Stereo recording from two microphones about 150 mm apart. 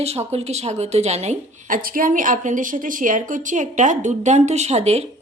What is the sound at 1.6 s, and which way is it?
Speech, 65° right (ahead or behind).